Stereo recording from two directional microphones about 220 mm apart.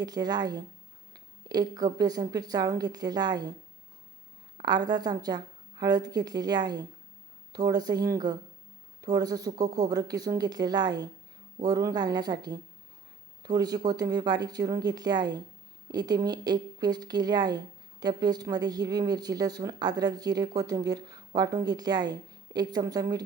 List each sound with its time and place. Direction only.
0.0 s speech: 20° right (ahead or behind)
4.5 s speech: 20° right (ahead or behind)